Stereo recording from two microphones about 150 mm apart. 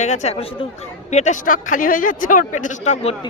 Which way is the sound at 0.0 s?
50° left (ahead or behind).